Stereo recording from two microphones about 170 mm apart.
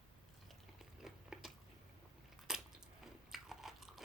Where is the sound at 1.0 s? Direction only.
5° right (ahead or behind).